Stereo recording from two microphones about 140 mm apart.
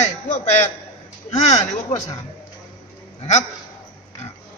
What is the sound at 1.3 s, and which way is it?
Speech, 55° left (ahead or behind).